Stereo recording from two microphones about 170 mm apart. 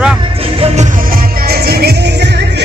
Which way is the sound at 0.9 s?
55° right (ahead or behind).